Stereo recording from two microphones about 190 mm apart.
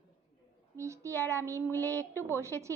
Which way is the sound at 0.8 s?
15° right (ahead or behind).